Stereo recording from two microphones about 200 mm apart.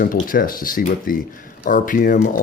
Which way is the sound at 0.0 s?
45° left (ahead or behind).